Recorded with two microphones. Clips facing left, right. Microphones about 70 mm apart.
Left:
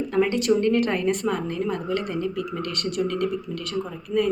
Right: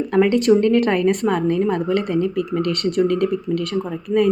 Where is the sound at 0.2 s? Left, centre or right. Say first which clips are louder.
Right 6 dB; right.